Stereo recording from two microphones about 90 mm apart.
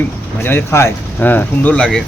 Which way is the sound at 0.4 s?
25° left (ahead or behind).